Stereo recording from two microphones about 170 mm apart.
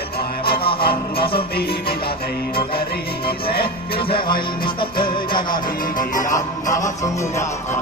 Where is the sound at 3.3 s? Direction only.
65° left (ahead or behind).